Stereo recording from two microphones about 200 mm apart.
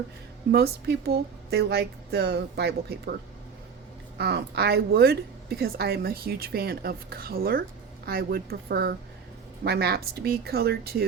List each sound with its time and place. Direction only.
0.5 s a woman's voice: 50° right (ahead or behind)
4.2 s a woman's voice: 55° right (ahead or behind)